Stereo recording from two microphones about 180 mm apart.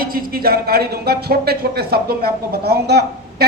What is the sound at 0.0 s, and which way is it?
Speech, 55° right (ahead or behind).